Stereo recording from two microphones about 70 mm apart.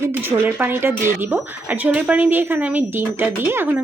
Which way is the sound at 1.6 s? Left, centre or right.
Right.